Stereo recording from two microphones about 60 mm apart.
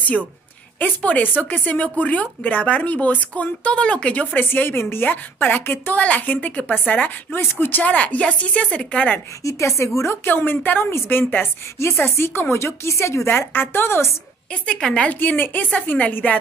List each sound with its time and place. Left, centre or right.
0.7 s speech: left
4.5 s a woman's voice: left
7.3 s a woman's voice: left
7.8 s speech: left
9.4 s a woman's voice: left
10.2 s a woman's voice: left
14.8 s a woman's voice: centre
15.1 s speech: left